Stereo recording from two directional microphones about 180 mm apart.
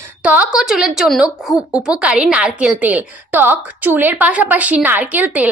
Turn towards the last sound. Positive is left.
turn(degrees=-10)  # may be behind; listen again after turning